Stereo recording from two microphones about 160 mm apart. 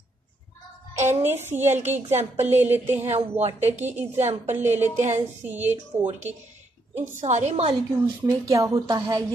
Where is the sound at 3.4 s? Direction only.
15° right (ahead or behind).